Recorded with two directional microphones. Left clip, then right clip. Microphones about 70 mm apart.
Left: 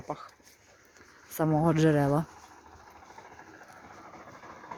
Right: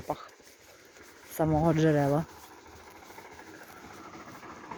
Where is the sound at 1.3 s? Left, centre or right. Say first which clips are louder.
Even; left.